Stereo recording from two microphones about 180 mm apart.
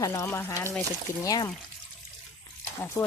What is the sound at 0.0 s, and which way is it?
Speech, 15° left (ahead or behind).